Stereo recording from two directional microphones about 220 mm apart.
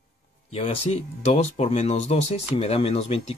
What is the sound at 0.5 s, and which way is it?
Speech, 30° left (ahead or behind).